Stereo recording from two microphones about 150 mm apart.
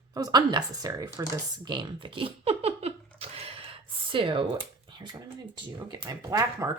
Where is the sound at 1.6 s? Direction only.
30° right (ahead or behind).